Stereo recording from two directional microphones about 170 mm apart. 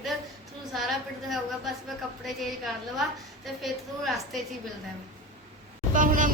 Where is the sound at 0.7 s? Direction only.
Centre (ahead or behind).